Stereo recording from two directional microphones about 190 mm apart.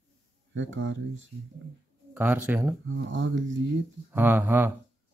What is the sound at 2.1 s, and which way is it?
Speech, 10° right (ahead or behind).